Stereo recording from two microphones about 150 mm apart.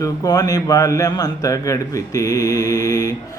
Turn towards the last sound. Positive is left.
turn(degrees=25)  # may be behind; listen again after turning